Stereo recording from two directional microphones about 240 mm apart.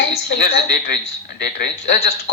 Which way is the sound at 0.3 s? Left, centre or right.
Left.